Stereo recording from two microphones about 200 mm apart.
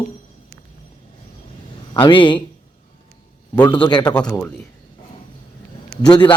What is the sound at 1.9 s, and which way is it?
Speech, 25° left (ahead or behind).